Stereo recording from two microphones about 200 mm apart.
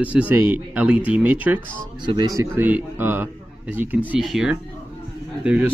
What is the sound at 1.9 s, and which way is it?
A man's voice, 20° right (ahead or behind).